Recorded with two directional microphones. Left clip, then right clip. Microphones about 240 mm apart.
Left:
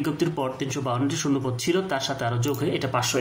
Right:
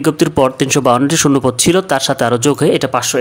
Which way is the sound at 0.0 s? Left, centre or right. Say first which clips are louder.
Right 14 dB; right.